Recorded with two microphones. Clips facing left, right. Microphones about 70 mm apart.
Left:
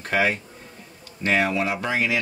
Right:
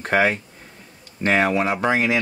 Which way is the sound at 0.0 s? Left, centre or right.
Right.